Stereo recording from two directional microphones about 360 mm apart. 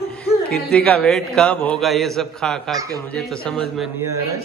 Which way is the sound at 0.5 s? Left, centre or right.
Left.